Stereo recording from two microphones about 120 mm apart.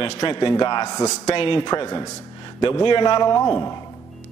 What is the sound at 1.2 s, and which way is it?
Speech, 50° left (ahead or behind).